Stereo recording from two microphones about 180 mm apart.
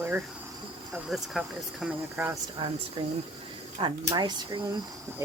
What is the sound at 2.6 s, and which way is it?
Speech, 30° right (ahead or behind).